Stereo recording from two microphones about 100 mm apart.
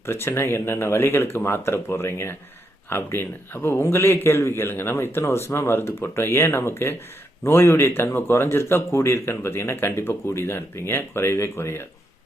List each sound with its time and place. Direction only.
0.0 s speech: 25° left (ahead or behind)